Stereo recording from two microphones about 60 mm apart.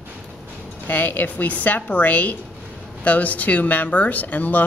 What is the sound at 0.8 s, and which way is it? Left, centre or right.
A woman's voice, left.